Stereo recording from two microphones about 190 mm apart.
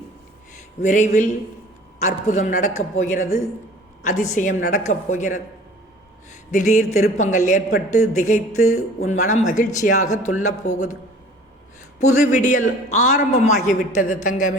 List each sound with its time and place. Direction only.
0.8 s a man's voice: 40° left (ahead or behind)
6.5 s a man's voice: 40° left (ahead or behind)
11.9 s a man's voice: 40° left (ahead or behind)